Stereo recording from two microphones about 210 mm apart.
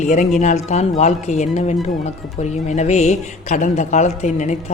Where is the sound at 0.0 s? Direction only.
35° left (ahead or behind).